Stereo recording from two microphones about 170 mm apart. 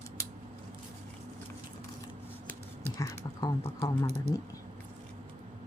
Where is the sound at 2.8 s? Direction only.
20° left (ahead or behind).